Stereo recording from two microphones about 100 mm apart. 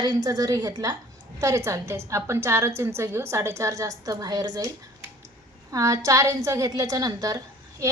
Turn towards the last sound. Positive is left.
turn(degrees=-35)  # may be behind; listen again after turning